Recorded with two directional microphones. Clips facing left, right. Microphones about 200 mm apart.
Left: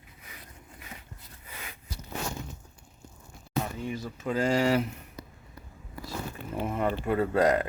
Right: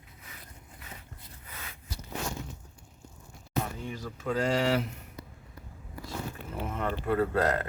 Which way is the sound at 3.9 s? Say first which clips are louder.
Left 1 dB; 5° left (ahead or behind).